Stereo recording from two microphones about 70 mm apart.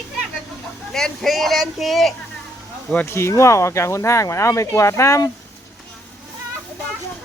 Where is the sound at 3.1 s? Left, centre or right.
Left.